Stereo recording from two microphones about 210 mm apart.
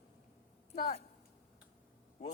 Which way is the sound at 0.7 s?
35° left (ahead or behind).